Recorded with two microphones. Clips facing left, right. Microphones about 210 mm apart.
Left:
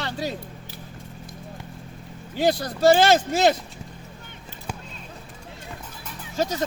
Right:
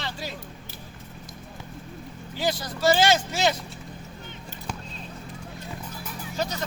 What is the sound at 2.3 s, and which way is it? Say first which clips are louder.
Speech: left 6 dB; 55° left (ahead or behind).